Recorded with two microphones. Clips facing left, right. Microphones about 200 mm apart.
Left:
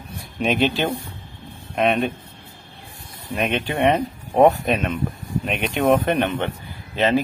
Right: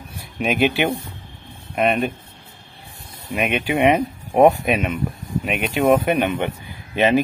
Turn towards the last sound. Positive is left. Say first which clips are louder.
# right 2 dB
turn(degrees=-15)  # may be behind; listen again after turning